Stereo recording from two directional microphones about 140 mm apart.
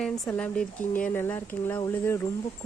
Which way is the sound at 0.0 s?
10° left (ahead or behind).